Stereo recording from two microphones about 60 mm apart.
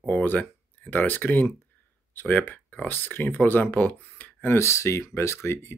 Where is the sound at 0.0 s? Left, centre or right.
Left.